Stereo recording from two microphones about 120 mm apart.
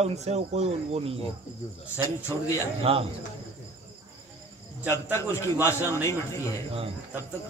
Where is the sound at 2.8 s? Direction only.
55° right (ahead or behind).